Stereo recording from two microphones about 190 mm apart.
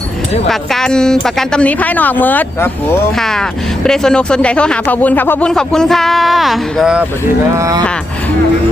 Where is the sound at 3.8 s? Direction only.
5° left (ahead or behind).